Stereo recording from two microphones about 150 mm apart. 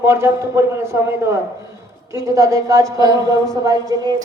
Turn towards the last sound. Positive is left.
turn(degrees=-25)  # may be behind; listen again after turning